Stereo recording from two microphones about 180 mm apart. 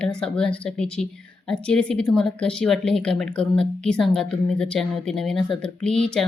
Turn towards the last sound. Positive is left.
turn(degrees=5)  # may be behind; listen again after turning